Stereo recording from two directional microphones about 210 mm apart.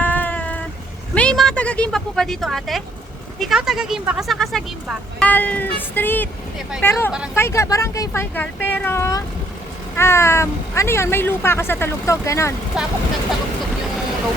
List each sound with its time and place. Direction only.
0.0 s meow: 10° left (ahead or behind)
1.1 s a sound: 5° left (ahead or behind)
3.3 s speech: centre (ahead or behind)
12.7 s speech: 5° right (ahead or behind)